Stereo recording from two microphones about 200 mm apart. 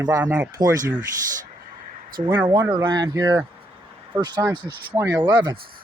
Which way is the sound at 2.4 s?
25° right (ahead or behind).